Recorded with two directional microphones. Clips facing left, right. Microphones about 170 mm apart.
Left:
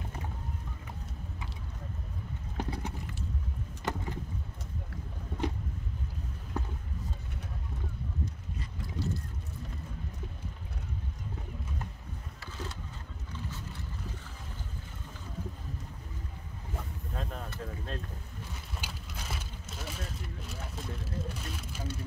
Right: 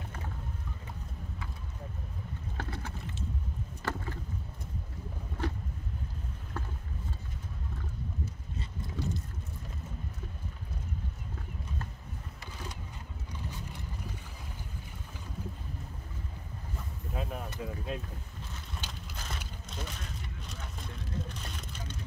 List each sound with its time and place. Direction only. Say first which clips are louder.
2.5 s boat: left 5 dB; 15° left (ahead or behind)
3.8 s vehicle: left 2 dB; 15° left (ahead or behind)
5.4 s a sound: left 2 dB; 20° left (ahead or behind)
6.5 s a sound: left 4 dB; 20° left (ahead or behind)
8.5 s boat: right 1 dB; 20° right (ahead or behind)
12.4 s boat: left 3 dB; 15° right (ahead or behind)
17.1 s speech: right 3 dB; 10° right (ahead or behind)
18.8 s vehicle: even; 10° left (ahead or behind)
21.0 s speech: left 1 dB; 5° left (ahead or behind)